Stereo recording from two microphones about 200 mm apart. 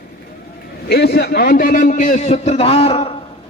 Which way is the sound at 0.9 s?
55° left (ahead or behind).